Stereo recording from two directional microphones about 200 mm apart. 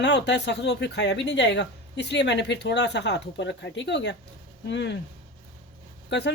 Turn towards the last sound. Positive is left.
turn(degrees=60)  # may be behind; listen again after turning